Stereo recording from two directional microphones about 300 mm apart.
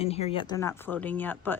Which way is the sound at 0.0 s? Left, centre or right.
Centre.